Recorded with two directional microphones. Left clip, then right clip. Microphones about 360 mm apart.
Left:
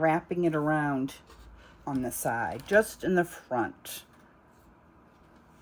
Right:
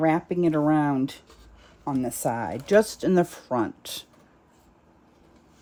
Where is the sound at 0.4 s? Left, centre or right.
Right.